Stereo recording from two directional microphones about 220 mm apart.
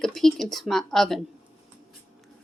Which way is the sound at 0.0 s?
Centre (ahead or behind).